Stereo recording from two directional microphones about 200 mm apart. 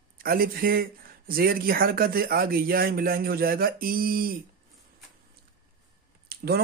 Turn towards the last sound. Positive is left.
turn(degrees=-50)  # may be behind; listen again after turning